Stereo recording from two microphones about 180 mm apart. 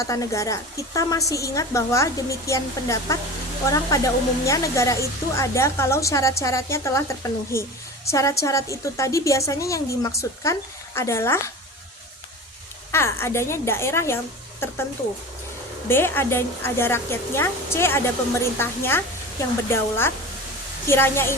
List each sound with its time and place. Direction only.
0.0 s speech: 20° left (ahead or behind)
12.9 s speech: 15° left (ahead or behind)
15.9 s speech: 10° left (ahead or behind)